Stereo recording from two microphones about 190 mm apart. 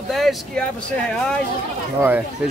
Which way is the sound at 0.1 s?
Centre (ahead or behind).